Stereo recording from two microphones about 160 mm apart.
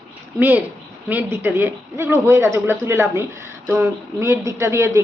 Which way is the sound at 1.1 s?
10° right (ahead or behind).